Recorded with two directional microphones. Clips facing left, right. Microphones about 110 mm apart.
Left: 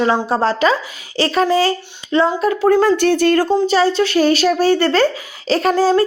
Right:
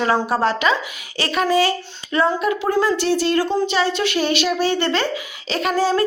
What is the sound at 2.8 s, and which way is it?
Speech, 50° left (ahead or behind).